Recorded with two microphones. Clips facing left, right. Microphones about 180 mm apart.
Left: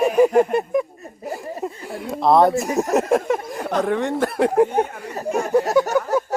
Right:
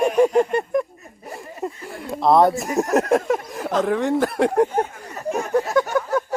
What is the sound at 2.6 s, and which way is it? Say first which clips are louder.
Speech: even; centre (ahead or behind).